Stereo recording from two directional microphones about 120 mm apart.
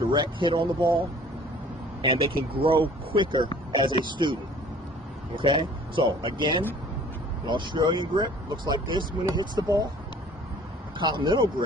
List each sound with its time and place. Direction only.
0.1 s speech: 40° right (ahead or behind)
5.4 s speech: 45° right (ahead or behind); by 9.8 s 30° right (ahead or behind)
10.9 s speech: 40° right (ahead or behind)